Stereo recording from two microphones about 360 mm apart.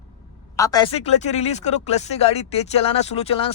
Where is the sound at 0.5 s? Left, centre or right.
Centre.